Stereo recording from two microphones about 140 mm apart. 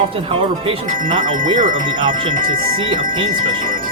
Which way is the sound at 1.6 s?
70° right (ahead or behind).